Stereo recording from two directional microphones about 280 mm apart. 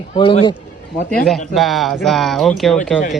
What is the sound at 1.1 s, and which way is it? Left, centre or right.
A man's voice, centre.